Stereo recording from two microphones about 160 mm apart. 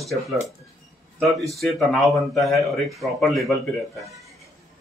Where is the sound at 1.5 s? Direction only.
Centre (ahead or behind).